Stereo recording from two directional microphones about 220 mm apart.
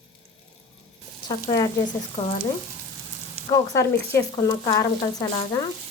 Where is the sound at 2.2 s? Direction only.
35° left (ahead or behind).